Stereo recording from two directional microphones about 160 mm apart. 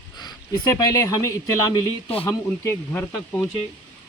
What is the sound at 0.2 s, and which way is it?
Speech, 25° left (ahead or behind).